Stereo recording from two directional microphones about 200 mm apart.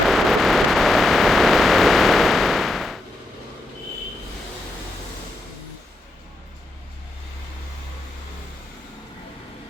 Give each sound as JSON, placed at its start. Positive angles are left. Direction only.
{"t": 0.0, "sound": "vehicle", "side_deg": 0}